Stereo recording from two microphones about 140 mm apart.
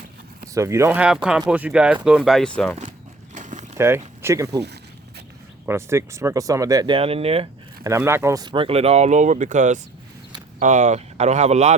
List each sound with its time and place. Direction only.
0.4 s speech: 20° right (ahead or behind)
0.9 s speech: 5° right (ahead or behind)
3.3 s a sound: 60° right (ahead or behind)
3.8 s speech: 20° right (ahead or behind)
5.6 s speech: 20° right (ahead or behind)
6.9 s speech: 45° right (ahead or behind)
7.9 s speech: 20° right (ahead or behind)
8.5 s speech: 45° right (ahead or behind)